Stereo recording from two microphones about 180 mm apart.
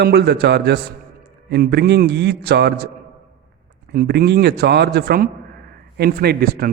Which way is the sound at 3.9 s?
55° right (ahead or behind).